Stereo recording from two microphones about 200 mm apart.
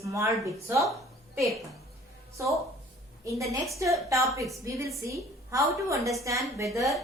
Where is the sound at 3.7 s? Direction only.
15° right (ahead or behind).